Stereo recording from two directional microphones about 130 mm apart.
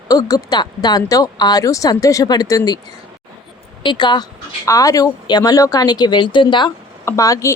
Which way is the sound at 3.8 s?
35° left (ahead or behind).